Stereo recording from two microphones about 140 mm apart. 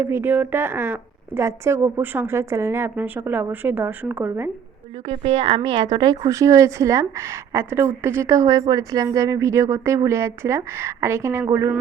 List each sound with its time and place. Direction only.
0.0 s speech: 15° right (ahead or behind)
5.0 s speech: 40° right (ahead or behind); by 11.7 s 20° right (ahead or behind)